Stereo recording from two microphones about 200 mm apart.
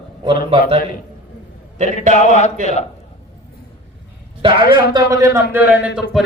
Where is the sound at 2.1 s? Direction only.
35° left (ahead or behind).